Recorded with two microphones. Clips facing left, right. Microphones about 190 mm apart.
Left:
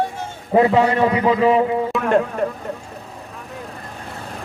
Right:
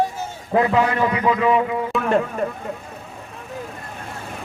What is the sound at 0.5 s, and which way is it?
A man's voice, 30° left (ahead or behind).